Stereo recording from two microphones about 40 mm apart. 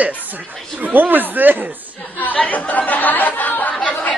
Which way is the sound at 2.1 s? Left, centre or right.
Left.